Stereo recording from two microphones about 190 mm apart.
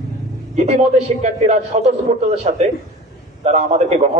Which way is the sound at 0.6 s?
35° right (ahead or behind).